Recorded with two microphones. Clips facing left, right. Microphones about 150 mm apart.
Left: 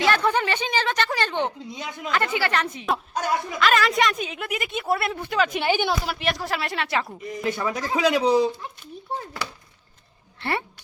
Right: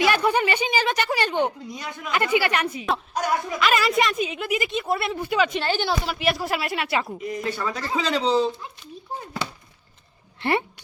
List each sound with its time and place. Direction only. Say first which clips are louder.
0.0 s speech: right 1 dB; 10° right (ahead or behind)
1.6 s speech: even; 20° left (ahead or behind)
2.1 s a woman's voice: right 2 dB; 10° right (ahead or behind)
5.5 s speech: left 1 dB; 15° left (ahead or behind)
6.1 s speech: right 2 dB; 5° right (ahead or behind)
7.4 s speech: left 5 dB; 15° left (ahead or behind)
10.4 s speech: right 4 dB; 20° right (ahead or behind)